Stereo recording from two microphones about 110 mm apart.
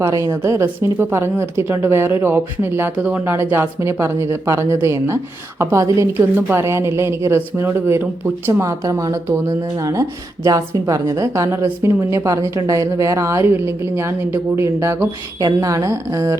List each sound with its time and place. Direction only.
0.0 s a woman's voice: 30° right (ahead or behind)